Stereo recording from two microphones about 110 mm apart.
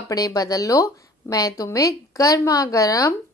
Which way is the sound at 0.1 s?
35° left (ahead or behind).